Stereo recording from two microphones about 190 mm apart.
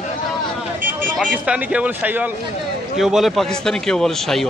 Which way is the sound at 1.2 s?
5° right (ahead or behind).